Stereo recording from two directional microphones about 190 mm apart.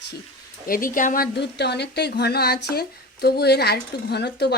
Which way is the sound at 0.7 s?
45° left (ahead or behind).